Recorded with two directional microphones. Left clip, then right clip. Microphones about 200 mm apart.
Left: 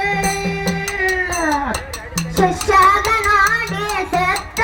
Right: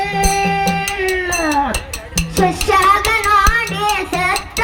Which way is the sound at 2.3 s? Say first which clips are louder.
Even; 20° right (ahead or behind).